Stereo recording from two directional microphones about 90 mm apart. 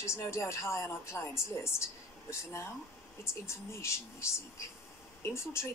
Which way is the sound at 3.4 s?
30° left (ahead or behind).